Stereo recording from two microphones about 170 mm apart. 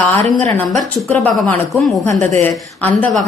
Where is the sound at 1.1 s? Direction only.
Centre (ahead or behind).